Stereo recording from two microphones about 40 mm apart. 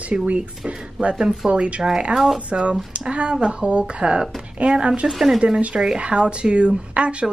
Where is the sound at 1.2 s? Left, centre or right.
Centre.